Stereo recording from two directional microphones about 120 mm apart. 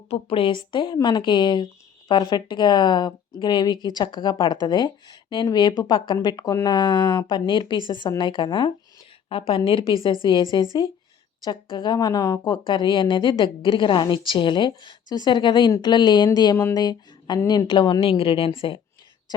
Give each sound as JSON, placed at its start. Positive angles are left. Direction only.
{"t": 0.1, "sound": "a woman's voice", "side_deg": 50}
{"t": 6.7, "sound": "a woman's voice", "side_deg": 45}
{"t": 12.5, "sound": "speech", "side_deg": 40}